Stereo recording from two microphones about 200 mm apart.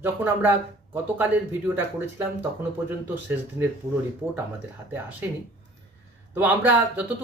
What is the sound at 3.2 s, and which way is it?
Speech, 10° right (ahead or behind).